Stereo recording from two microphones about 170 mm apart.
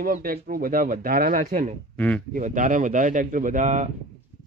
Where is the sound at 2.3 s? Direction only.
50° right (ahead or behind).